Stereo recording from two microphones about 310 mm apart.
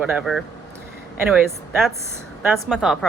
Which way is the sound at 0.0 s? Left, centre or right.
Centre.